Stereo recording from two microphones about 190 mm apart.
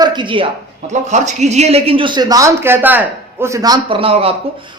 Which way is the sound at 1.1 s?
35° right (ahead or behind).